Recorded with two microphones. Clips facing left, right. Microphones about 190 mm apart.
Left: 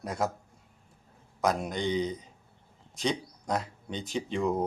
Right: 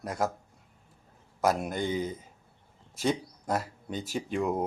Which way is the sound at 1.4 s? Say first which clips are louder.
Right 1 dB; 5° right (ahead or behind).